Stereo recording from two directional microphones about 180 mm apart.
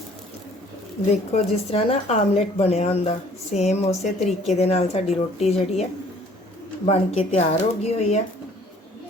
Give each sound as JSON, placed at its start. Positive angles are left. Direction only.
{"t": 1.3, "sound": "speech", "side_deg": 35}